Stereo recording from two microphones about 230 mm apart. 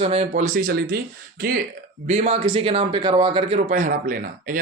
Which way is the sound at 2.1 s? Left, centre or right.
Right.